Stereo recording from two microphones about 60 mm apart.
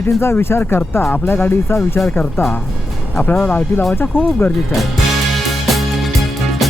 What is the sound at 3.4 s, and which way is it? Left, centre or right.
Speech, left.